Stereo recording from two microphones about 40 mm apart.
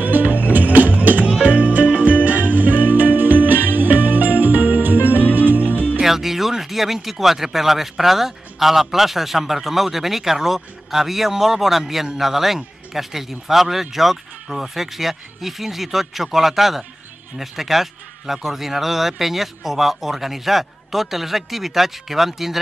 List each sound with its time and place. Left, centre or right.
0.0 s music: right
1.3 s music: right
1.6 s music: right
6.0 s speech: centre